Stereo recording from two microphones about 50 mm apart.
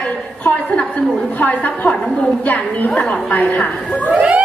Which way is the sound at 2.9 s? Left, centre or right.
Centre.